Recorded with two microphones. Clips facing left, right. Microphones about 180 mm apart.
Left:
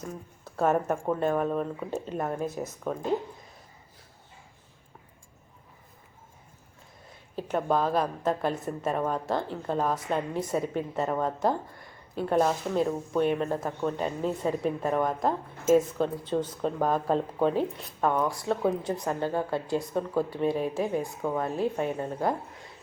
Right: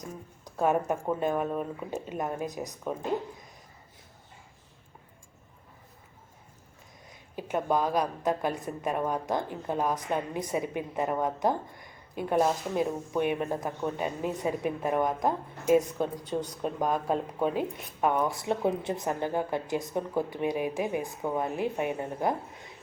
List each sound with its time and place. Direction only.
0.0 s a sound: 15° right (ahead or behind)
1.2 s a woman's voice: 5° right (ahead or behind)
7.3 s a woman's voice: 10° right (ahead or behind)